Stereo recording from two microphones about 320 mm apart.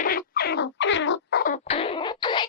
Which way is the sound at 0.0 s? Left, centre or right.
Left.